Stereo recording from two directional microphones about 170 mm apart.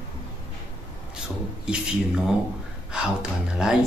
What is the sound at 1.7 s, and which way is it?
A woman's voice, 5° right (ahead or behind).